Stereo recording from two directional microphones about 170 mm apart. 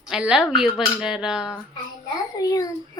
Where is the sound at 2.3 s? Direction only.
20° left (ahead or behind).